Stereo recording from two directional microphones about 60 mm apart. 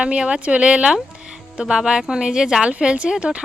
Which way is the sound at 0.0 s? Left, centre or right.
Centre.